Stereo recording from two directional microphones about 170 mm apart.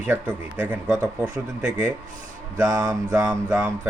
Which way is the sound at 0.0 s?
10° right (ahead or behind).